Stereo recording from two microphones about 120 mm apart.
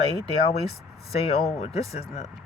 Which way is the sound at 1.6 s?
60° left (ahead or behind).